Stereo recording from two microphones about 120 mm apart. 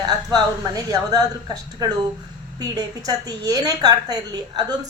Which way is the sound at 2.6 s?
35° right (ahead or behind).